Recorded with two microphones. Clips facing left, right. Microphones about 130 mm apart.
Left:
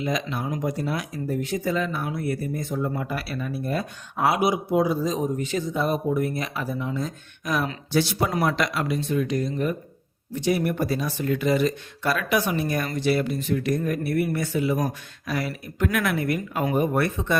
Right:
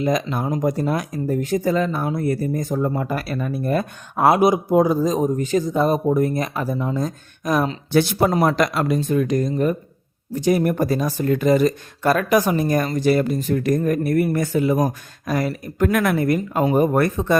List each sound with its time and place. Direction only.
0.0 s speech: 45° right (ahead or behind)
7.9 s speech: 50° right (ahead or behind)